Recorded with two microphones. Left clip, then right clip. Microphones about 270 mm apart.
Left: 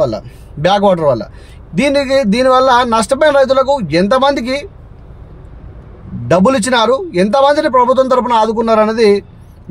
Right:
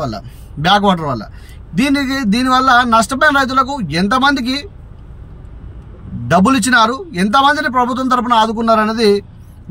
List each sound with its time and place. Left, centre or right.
0.7 s a man's voice: left
6.3 s a man's voice: left